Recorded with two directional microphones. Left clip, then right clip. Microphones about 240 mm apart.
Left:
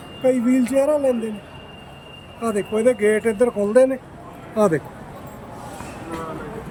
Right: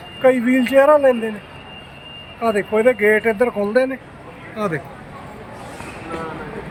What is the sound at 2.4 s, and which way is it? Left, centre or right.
Speech, centre.